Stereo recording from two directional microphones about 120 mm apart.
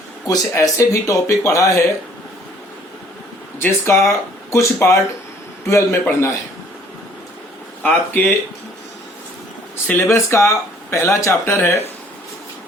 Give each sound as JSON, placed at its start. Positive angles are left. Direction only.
{"t": 0.3, "sound": "speech", "side_deg": 25}
{"t": 3.6, "sound": "speech", "side_deg": 20}
{"t": 7.8, "sound": "speech", "side_deg": 15}
{"t": 9.8, "sound": "speech", "side_deg": 15}